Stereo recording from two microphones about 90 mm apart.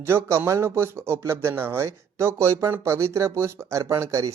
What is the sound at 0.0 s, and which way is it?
A man's voice, 30° right (ahead or behind).